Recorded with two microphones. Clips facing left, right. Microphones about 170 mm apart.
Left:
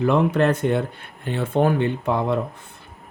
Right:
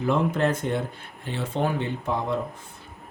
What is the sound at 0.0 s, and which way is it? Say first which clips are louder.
Speech: left 5 dB; 70° left (ahead or behind).